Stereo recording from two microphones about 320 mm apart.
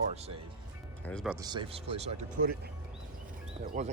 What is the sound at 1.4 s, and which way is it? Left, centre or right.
Speech, centre.